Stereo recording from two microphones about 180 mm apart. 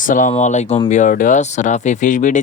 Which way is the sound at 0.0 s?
45° left (ahead or behind).